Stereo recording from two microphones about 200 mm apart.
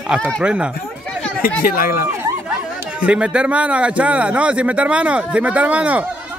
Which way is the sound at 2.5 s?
5° right (ahead or behind).